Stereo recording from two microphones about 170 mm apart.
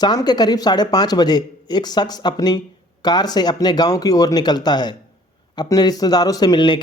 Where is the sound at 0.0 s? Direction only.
25° left (ahead or behind).